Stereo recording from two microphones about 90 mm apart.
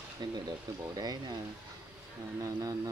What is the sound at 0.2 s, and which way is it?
Speech, 55° right (ahead or behind).